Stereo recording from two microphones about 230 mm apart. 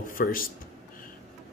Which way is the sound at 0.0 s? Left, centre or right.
Left.